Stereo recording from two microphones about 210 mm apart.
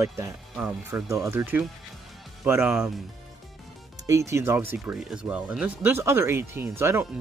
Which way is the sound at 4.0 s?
15° right (ahead or behind).